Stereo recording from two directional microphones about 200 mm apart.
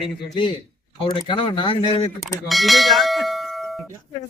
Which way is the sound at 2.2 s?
Centre (ahead or behind).